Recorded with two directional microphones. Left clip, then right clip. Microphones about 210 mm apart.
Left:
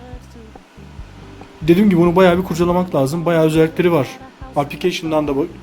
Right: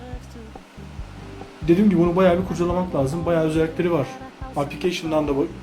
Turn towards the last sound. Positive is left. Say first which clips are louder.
# left 4 dB
turn(degrees=40)  # may be behind; listen again after turning